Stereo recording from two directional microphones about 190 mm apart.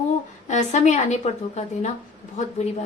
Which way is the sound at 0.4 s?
40° left (ahead or behind).